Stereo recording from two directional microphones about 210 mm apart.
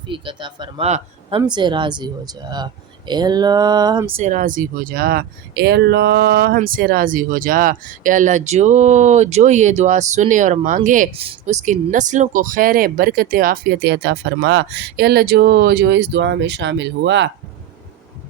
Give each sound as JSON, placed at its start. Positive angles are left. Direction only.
{"t": 0.1, "sound": "speech", "side_deg": -25}
{"t": 4.2, "sound": "speech", "side_deg": -40}